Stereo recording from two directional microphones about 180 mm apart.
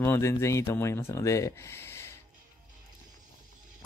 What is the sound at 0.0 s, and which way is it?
Speech, 15° left (ahead or behind).